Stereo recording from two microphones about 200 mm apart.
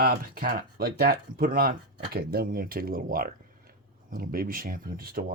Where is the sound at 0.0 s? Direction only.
45° right (ahead or behind).